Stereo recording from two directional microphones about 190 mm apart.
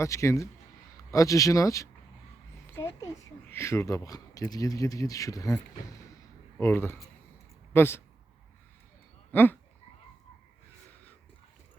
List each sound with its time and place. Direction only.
0.0 s speech: 15° left (ahead or behind)
6.6 s speech: 15° left (ahead or behind)
9.3 s frog: 10° left (ahead or behind)